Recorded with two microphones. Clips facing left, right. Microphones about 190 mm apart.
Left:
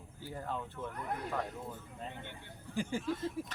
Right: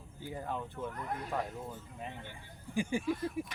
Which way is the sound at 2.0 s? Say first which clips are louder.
Even; 10° right (ahead or behind).